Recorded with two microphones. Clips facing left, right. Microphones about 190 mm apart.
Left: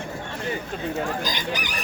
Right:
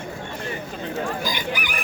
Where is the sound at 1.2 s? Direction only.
20° left (ahead or behind).